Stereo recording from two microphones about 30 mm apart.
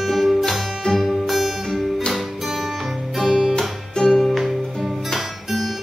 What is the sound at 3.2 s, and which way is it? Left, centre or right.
Music, centre.